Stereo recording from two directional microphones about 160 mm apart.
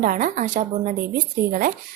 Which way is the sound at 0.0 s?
55° right (ahead or behind).